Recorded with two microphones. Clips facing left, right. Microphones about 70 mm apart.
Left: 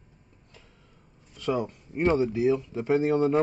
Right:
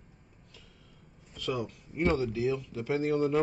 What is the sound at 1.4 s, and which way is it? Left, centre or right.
Speech, left.